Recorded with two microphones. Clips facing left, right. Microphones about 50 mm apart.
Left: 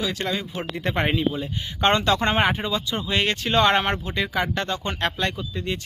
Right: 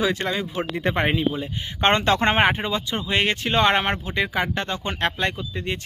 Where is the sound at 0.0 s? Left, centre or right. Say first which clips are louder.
Right 3 dB; right.